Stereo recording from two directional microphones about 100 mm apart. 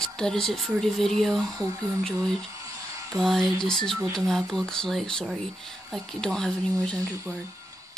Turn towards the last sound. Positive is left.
turn(degrees=-30)  # may be behind; listen again after turning